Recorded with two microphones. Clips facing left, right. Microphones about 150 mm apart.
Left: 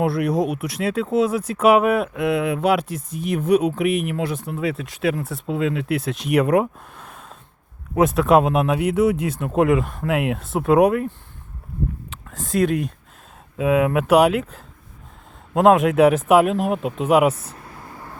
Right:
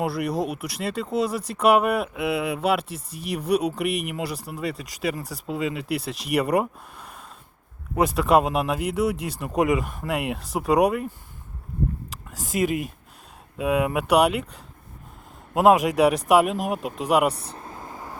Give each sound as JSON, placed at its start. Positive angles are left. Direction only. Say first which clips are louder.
{"t": 0.0, "sound": "speech", "louder": "left 5 dB", "side_deg": 0}
{"t": 7.0, "sound": "a sound", "louder": "left 2 dB", "side_deg": 0}
{"t": 7.9, "sound": "speech", "louder": "left 4 dB", "side_deg": 0}
{"t": 12.4, "sound": "speech", "louder": "left 4 dB", "side_deg": -5}
{"t": 17.3, "sound": "vehicle", "louder": "right 2 dB", "side_deg": -30}